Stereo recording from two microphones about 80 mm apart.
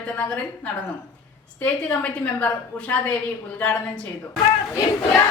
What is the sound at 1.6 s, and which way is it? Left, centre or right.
A woman's voice, centre.